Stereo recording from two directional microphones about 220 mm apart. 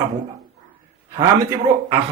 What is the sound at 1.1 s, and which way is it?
Speech, 15° right (ahead or behind).